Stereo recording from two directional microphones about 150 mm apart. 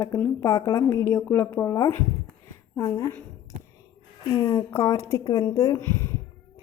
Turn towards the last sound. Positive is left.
turn(degrees=15)  # may be behind; listen again after turning